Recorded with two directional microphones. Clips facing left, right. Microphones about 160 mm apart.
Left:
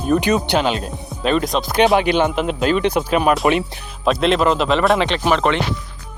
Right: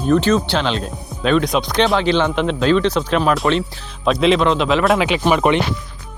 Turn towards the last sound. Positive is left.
turn(degrees=-10)  # may be behind; listen again after turning